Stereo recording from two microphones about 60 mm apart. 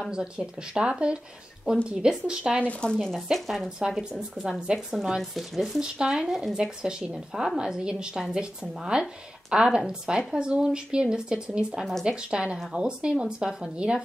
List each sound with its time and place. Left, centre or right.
0.1 s speech: centre
2.6 s speech: left
3.3 s speech: centre
5.8 s speech: centre
11.8 s speech: centre
12.1 s speech: centre